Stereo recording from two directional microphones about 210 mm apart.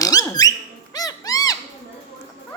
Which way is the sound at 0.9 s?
15° left (ahead or behind).